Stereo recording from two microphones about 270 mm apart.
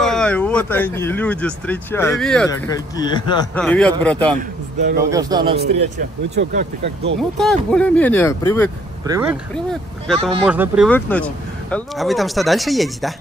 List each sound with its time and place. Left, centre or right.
0.0 s speech: centre
2.7 s speech: centre
3.5 s speech: centre
5.1 s a man's voice: centre
6.3 s speech: right
7.2 s speech: centre
9.0 s speech: centre
10.9 s speech: centre